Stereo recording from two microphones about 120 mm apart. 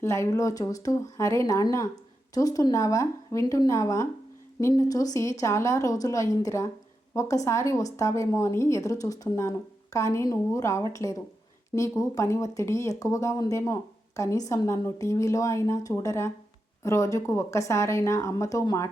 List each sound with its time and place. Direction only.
0.0 s a woman's voice: 25° left (ahead or behind)